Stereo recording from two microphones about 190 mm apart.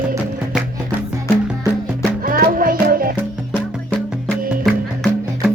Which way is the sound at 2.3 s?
50° right (ahead or behind).